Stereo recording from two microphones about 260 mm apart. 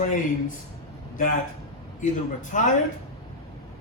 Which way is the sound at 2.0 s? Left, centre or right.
Left.